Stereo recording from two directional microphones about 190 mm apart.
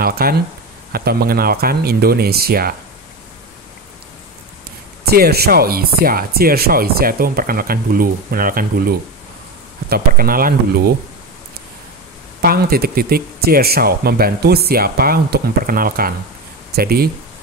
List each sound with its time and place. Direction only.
0.0 s speech: 50° right (ahead or behind)
5.1 s speech: 55° right (ahead or behind)
12.4 s speech: 55° right (ahead or behind)